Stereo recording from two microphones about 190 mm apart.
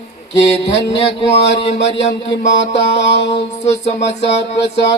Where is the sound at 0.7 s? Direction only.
30° left (ahead or behind).